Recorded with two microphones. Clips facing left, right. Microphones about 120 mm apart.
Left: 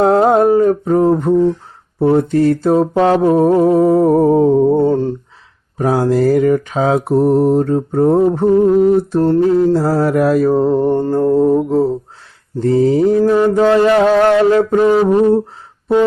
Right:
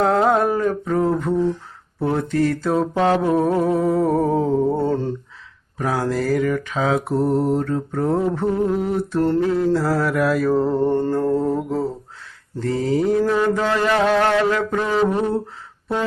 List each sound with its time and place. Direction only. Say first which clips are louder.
0.0 s mantra: left 6 dB; 35° left (ahead or behind)
4.7 s a sound: left 8 dB; 15° left (ahead or behind)
5.7 s mantra: left 8 dB; 30° left (ahead or behind)
10.8 s mantra: left 5 dB; 15° left (ahead or behind); by 13.2 s 35° left (ahead or behind)
13.2 s mantra: left 7 dB; 20° left (ahead or behind)
13.7 s mantra: left 8 dB; 35° left (ahead or behind)
14.8 s mantra: left 8 dB; 20° left (ahead or behind)